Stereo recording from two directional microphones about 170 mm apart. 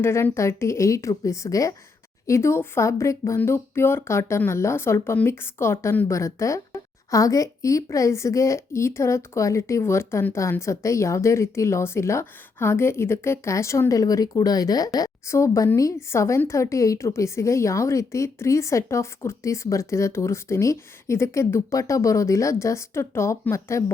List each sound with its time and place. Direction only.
0.0 s speech: 15° left (ahead or behind)